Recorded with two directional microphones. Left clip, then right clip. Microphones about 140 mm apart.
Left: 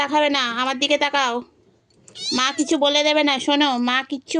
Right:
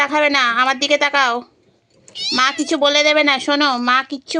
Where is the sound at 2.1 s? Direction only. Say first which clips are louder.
Right 5 dB; 35° left (ahead or behind).